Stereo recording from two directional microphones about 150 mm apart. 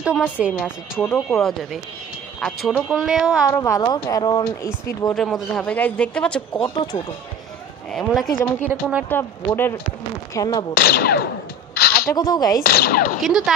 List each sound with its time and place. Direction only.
0.0 s a woman's voice: 5° right (ahead or behind)
1.0 s speech: 15° left (ahead or behind)
1.4 s speech: centre (ahead or behind)
3.4 s speech: 20° left (ahead or behind)
5.1 s speech: 5° left (ahead or behind)
6.6 s speech: 35° left (ahead or behind)
7.9 s speech: centre (ahead or behind)
8.6 s a woman's voice: 10° right (ahead or behind)
9.6 s speech: 15° left (ahead or behind)
10.7 s speech: 90° left
11.7 s a sound: 90° left
12.1 s speech: 25° left (ahead or behind)
12.6 s speech: 90° left; by 13.2 s 75° left (ahead or behind)
13.2 s speech: 5° right (ahead or behind)